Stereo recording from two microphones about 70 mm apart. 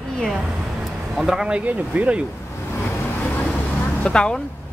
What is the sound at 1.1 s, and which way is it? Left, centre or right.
Speech, centre.